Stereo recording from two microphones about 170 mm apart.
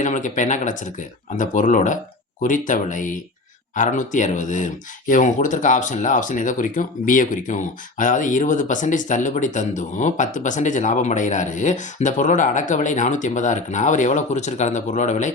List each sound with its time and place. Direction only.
0.0 s speech: 45° left (ahead or behind)